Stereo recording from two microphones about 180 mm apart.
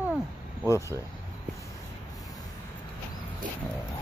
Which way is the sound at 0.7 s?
15° left (ahead or behind).